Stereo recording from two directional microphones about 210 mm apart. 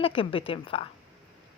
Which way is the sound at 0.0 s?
25° left (ahead or behind).